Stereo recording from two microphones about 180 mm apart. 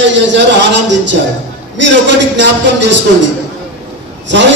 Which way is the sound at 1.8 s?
80° right.